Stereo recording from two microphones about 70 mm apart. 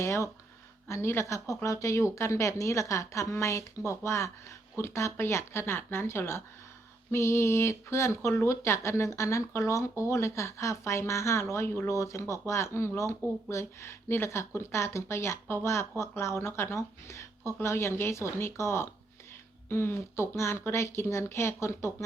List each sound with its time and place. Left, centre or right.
0.0 s speech: left